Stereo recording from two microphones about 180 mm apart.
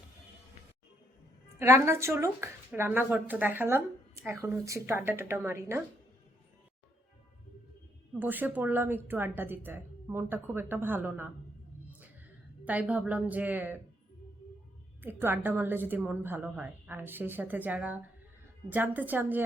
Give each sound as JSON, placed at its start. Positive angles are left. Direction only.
{"t": 1.5, "sound": "a woman's voice", "side_deg": -15}
{"t": 8.2, "sound": "a woman's voice", "side_deg": -10}
{"t": 12.6, "sound": "a woman's voice", "side_deg": -10}
{"t": 15.0, "sound": "a woman's voice", "side_deg": -10}